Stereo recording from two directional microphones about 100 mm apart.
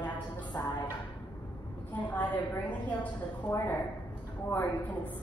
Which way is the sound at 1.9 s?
15° left (ahead or behind).